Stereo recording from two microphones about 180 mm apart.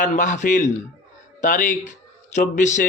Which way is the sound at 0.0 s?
45° left (ahead or behind).